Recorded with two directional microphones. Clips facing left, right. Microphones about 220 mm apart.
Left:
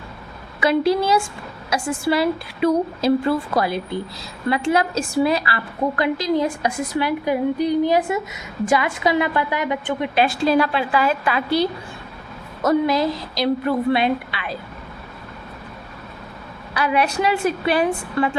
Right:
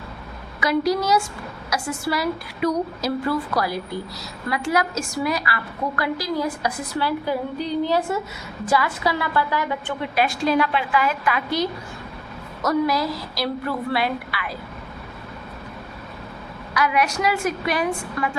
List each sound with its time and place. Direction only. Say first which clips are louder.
0.6 s a woman's voice: left 3 dB; 25° left (ahead or behind)
16.7 s a woman's voice: left 2 dB; 30° left (ahead or behind)